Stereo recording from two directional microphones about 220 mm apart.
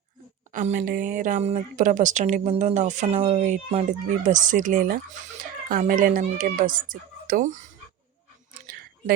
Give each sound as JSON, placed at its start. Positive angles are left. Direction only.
{"t": 0.5, "sound": "speech", "side_deg": -35}